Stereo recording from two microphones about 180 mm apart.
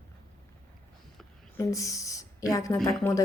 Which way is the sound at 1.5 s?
20° left (ahead or behind).